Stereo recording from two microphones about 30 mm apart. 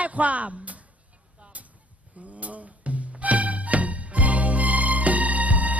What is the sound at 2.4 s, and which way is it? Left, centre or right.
Music, right.